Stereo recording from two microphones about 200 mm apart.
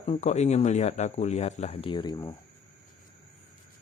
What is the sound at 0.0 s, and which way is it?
Speech, 35° left (ahead or behind).